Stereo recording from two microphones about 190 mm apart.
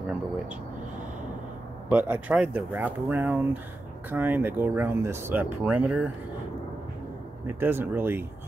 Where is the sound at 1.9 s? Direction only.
10° right (ahead or behind).